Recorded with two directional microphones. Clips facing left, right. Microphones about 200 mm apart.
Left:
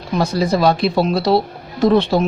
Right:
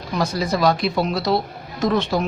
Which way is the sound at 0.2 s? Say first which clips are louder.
Left 4 dB; 30° left (ahead or behind).